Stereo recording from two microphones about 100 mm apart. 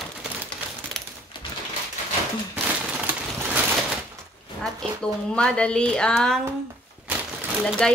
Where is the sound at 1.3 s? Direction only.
55° left (ahead or behind).